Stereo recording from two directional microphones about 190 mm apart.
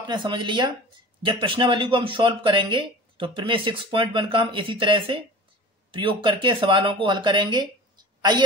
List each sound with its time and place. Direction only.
0.0 s a man's voice: 25° right (ahead or behind)